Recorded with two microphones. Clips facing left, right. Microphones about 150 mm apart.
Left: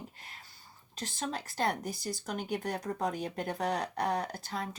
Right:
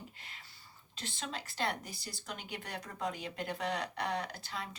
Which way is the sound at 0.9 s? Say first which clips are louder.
Left 5 dB; 45° left (ahead or behind).